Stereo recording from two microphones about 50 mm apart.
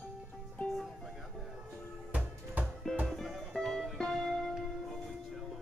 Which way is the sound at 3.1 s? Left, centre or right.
Centre.